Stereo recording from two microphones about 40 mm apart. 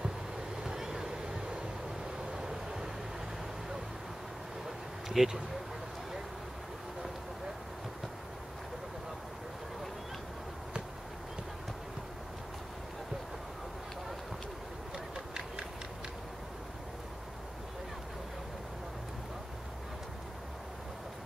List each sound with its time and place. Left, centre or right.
0.7 s vehicle: centre
5.1 s speech: centre
15.1 s a sound: centre